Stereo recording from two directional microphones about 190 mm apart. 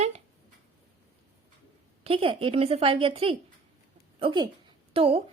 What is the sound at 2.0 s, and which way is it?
A woman's voice, 30° right (ahead or behind).